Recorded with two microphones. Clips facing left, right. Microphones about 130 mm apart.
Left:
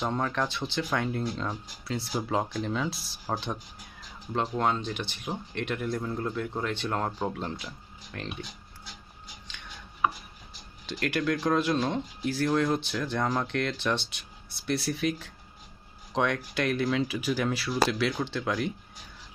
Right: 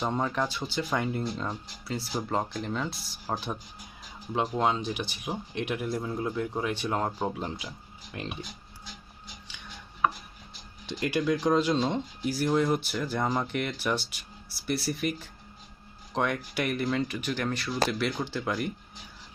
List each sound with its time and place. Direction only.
0.0 s speech: 10° right (ahead or behind)
4.4 s speech: 15° right (ahead or behind)
10.8 s speech: 15° right (ahead or behind)